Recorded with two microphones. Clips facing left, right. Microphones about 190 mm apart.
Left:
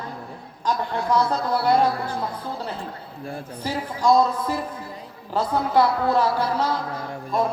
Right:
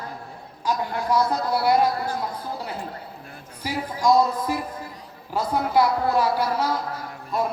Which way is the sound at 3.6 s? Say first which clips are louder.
Left 1 dB; 10° right (ahead or behind).